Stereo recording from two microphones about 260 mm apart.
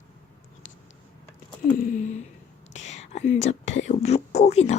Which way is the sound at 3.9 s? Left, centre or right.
Left.